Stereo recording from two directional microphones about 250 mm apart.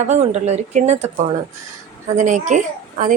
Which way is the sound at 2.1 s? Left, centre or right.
Right.